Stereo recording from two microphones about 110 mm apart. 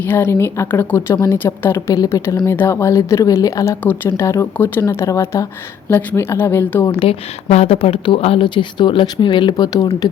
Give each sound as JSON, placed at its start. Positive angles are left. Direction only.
{"t": 0.1, "sound": "a woman's voice", "side_deg": 25}
{"t": 1.9, "sound": "a woman's voice", "side_deg": 35}
{"t": 7.1, "sound": "speech", "side_deg": 70}